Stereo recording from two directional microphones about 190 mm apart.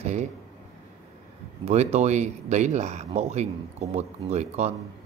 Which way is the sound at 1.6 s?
35° right (ahead or behind).